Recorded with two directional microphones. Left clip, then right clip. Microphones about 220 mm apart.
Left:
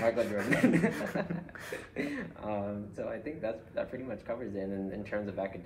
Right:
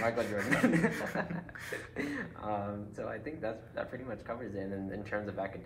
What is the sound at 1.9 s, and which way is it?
Speech, 15° right (ahead or behind).